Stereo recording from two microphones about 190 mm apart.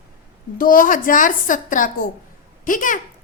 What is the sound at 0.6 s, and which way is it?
A woman's voice, 45° left (ahead or behind).